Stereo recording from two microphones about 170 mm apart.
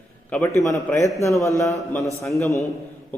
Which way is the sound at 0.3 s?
10° left (ahead or behind).